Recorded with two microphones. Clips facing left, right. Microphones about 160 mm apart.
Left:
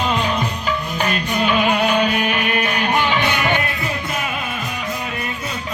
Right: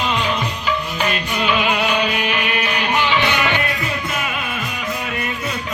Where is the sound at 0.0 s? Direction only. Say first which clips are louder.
Left 1 dB; 40° left (ahead or behind).